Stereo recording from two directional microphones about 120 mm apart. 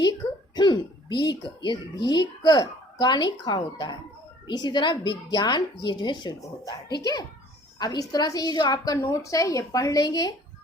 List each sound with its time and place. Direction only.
0.5 s a woman's voice: 35° left (ahead or behind)